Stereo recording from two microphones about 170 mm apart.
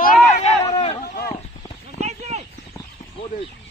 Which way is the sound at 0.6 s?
35° left (ahead or behind).